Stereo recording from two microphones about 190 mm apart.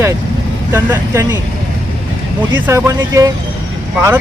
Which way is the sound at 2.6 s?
15° right (ahead or behind).